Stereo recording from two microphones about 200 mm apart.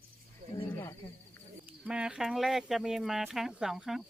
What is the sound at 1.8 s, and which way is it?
Speech, 5° right (ahead or behind).